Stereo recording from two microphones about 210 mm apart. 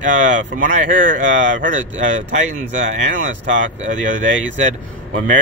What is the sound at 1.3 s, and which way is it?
Speech, 60° right (ahead or behind).